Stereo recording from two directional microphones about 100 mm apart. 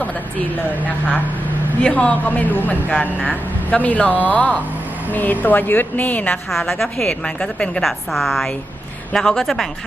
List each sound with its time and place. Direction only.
0.9 s speech: 15° left (ahead or behind)
6.5 s a woman's voice: 5° left (ahead or behind)